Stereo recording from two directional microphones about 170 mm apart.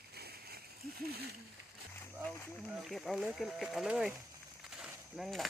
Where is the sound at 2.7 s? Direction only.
Centre (ahead or behind).